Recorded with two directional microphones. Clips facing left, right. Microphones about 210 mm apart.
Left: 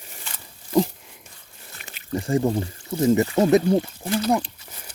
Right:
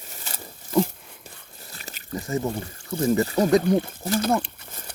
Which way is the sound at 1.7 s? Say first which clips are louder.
Right 3 dB; 35° right (ahead or behind).